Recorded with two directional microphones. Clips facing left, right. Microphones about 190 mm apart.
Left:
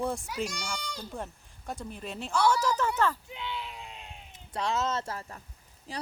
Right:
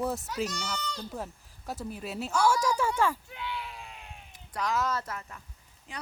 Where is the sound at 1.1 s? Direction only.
5° right (ahead or behind).